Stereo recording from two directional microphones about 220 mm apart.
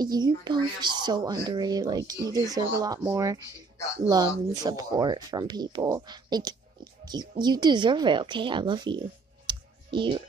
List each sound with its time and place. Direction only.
0.0 s speech: 20° right (ahead or behind)
9.5 s clicking: 20° right (ahead or behind)